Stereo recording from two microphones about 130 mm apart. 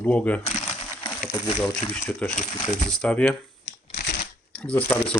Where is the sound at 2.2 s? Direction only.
10° left (ahead or behind).